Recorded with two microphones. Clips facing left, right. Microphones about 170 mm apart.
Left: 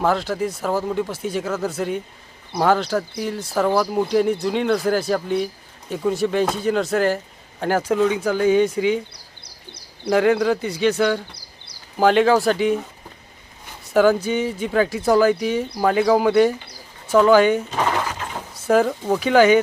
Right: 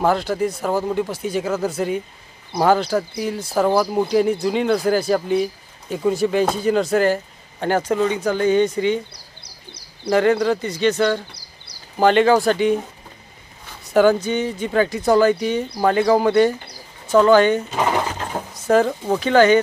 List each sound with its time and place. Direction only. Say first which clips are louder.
0.0 s speech: right 2 dB; centre (ahead or behind)
10.1 s speech: even; centre (ahead or behind)
13.9 s speech: right 1 dB; centre (ahead or behind)